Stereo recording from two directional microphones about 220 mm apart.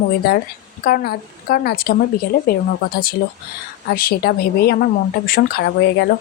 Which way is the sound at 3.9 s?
45° left (ahead or behind).